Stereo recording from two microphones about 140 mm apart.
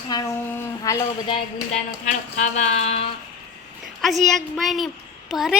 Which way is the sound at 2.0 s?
60° left (ahead or behind).